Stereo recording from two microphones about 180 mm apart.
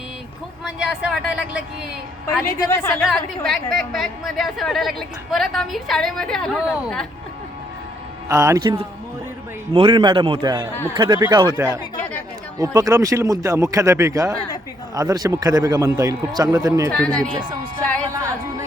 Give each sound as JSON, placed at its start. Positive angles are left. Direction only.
{"t": 0.6, "sound": "a woman's voice", "side_deg": -5}
{"t": 2.4, "sound": "a woman's voice", "side_deg": 15}
{"t": 3.0, "sound": "a woman's voice", "side_deg": 0}
{"t": 8.3, "sound": "a man's voice", "side_deg": -15}
{"t": 12.5, "sound": "a man's voice", "side_deg": -20}